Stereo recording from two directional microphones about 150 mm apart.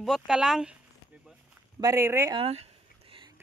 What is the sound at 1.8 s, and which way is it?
Speech, 20° right (ahead or behind).